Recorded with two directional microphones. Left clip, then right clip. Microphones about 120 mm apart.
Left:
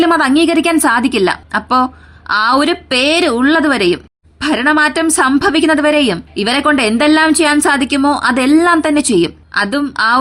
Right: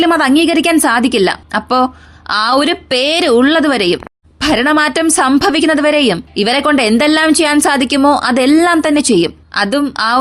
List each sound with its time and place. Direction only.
0.0 s a woman's voice: 20° right (ahead or behind)